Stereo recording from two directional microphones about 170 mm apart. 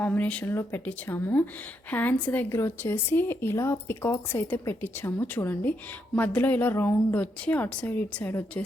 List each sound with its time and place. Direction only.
0.0 s speech: 10° left (ahead or behind)